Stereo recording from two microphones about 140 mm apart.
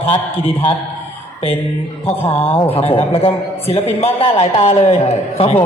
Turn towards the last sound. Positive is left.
turn(degrees=45)  # may be behind; listen again after turning